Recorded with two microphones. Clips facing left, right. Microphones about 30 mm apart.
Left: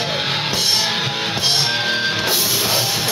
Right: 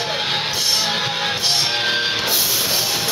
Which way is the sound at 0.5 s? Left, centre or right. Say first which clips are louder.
Left 1 dB; centre.